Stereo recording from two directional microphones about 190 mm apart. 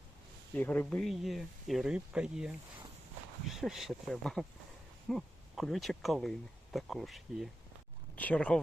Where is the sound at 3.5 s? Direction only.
Centre (ahead or behind).